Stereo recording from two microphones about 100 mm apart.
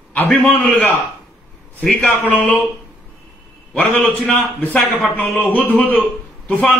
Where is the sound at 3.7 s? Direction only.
15° left (ahead or behind).